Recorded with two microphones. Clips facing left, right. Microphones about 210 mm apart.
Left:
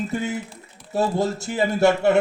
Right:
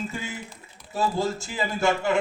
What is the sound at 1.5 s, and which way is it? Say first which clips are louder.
Speech: left 7 dB; 65° left (ahead or behind).